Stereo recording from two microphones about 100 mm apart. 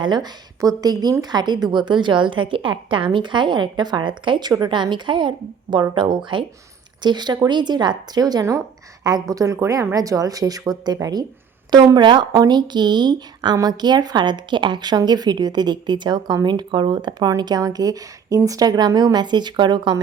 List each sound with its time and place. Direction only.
0.0 s a woman's voice: 45° right (ahead or behind)